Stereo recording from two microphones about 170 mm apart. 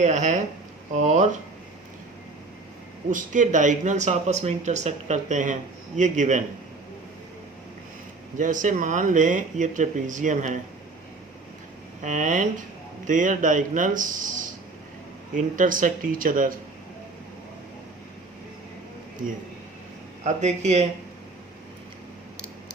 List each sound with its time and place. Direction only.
0.0 s speech: 45° right (ahead or behind)
3.1 s speech: 50° right (ahead or behind)
8.4 s speech: 50° right (ahead or behind)
12.0 s speech: 50° right (ahead or behind)
20.2 s speech: 40° right (ahead or behind)